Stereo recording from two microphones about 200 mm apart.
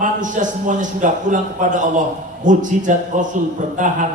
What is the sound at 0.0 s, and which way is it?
A man's voice, 40° right (ahead or behind).